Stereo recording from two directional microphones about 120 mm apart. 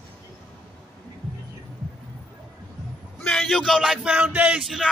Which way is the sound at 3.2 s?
5° left (ahead or behind).